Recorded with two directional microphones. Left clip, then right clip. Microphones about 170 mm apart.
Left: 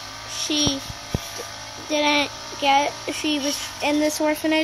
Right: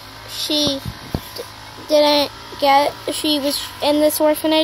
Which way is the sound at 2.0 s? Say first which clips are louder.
Right 6 dB; 10° right (ahead or behind).